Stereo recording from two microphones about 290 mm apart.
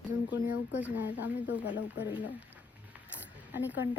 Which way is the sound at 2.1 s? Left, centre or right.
Centre.